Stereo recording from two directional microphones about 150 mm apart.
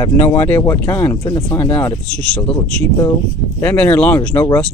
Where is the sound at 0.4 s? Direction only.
15° left (ahead or behind).